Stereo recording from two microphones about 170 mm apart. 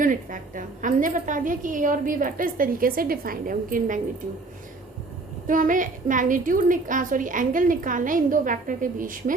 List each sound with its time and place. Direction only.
0.0 s a woman's voice: 50° right (ahead or behind)
5.5 s a woman's voice: 50° right (ahead or behind)